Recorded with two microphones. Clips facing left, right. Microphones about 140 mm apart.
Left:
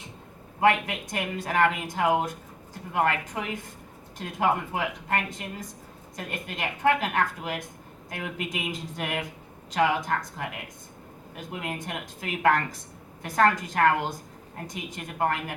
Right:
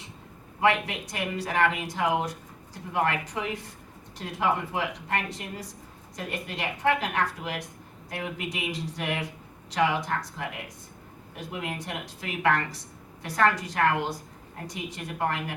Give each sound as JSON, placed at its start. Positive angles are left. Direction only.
{"t": 0.6, "sound": "speech", "side_deg": 45}